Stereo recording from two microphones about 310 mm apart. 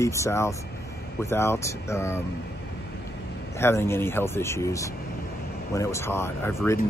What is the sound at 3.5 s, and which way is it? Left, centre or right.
Speech, centre.